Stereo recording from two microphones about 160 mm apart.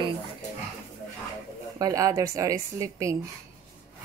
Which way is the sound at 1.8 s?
20° right (ahead or behind).